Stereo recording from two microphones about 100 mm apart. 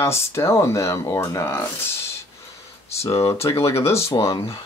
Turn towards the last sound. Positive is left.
turn(degrees=30)  # may be behind; listen again after turning